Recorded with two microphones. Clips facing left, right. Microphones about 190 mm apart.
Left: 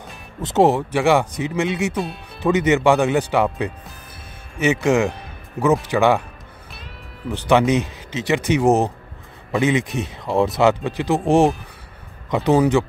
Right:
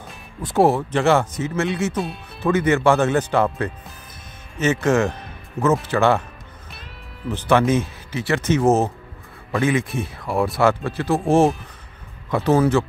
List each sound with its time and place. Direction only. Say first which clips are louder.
0.4 s speech: left 1 dB; 20° left (ahead or behind)
7.3 s speech: left 1 dB; 15° left (ahead or behind)